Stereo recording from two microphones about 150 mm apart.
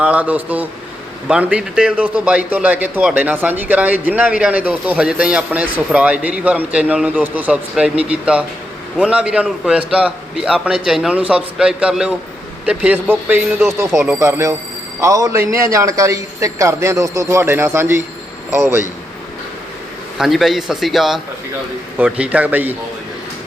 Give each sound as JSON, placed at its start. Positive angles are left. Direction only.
{"t": 0.0, "sound": "a man's voice", "side_deg": -10}
{"t": 20.1, "sound": "a man's voice", "side_deg": 0}